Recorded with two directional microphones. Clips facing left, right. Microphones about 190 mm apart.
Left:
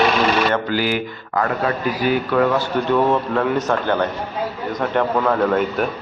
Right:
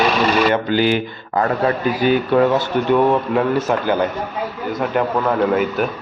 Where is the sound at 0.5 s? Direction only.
20° right (ahead or behind).